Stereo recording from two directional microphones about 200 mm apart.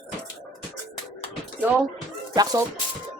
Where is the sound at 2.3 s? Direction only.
20° right (ahead or behind).